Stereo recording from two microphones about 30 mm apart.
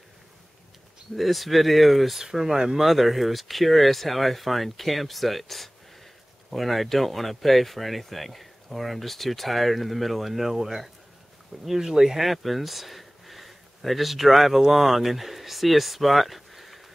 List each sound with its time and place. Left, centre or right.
1.1 s speech: centre
12.2 s speech: centre